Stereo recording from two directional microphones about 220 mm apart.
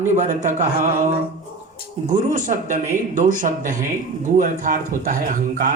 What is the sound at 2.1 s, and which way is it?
Speech, 35° right (ahead or behind).